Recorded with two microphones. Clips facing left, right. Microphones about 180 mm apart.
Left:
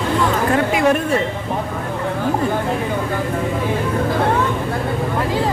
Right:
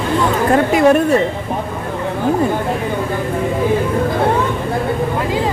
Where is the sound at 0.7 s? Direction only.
40° right (ahead or behind).